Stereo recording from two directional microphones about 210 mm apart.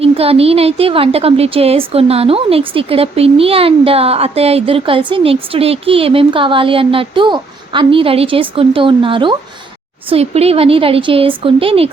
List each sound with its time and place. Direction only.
0.0 s a woman's voice: 30° right (ahead or behind)